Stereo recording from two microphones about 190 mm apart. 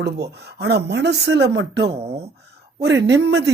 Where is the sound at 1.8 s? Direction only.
35° right (ahead or behind).